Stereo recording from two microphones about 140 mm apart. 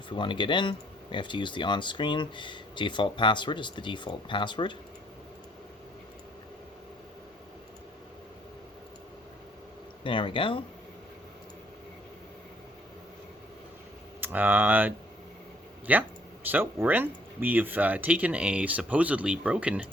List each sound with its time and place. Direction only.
0.1 s speech: 35° left (ahead or behind)
10.0 s speech: 35° left (ahead or behind)
14.2 s speech: 15° right (ahead or behind)